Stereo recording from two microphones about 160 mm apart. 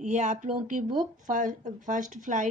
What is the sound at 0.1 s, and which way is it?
Speech, 50° right (ahead or behind).